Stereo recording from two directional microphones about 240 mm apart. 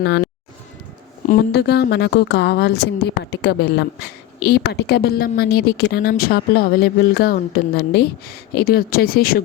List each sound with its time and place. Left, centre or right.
0.0 s speech: left
1.3 s a woman's voice: left